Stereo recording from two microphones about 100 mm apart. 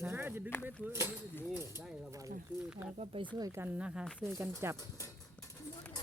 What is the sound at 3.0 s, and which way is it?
Speech, 90° right.